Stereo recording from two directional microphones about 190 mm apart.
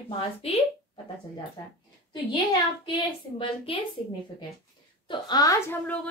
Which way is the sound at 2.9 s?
25° left (ahead or behind).